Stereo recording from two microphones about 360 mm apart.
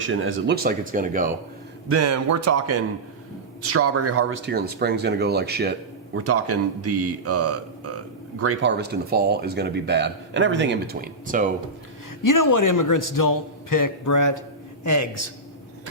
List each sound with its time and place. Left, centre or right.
0.0 s speech: right
1.9 s speech: right
6.1 s speech: right
12.2 s a man's voice: left